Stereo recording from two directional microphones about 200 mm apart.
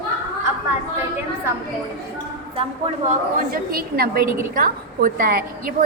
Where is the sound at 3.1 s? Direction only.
45° right (ahead or behind).